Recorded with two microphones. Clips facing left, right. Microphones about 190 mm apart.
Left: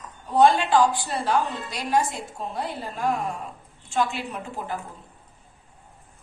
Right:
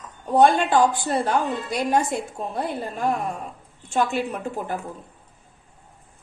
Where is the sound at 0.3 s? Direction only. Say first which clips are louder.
Right 1 dB; 55° right (ahead or behind).